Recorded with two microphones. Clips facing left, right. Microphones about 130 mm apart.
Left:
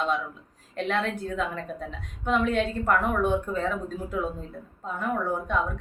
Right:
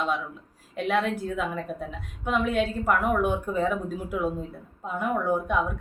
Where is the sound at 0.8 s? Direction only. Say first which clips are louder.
Right 2 dB; 5° right (ahead or behind).